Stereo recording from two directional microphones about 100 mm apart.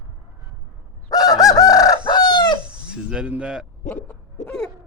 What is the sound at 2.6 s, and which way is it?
Speech, 10° right (ahead or behind).